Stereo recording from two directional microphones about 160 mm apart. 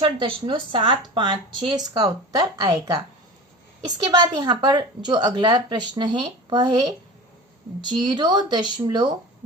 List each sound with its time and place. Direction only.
0.0 s a woman's voice: 30° right (ahead or behind)